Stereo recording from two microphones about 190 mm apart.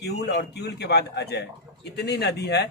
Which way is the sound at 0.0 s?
60° left (ahead or behind).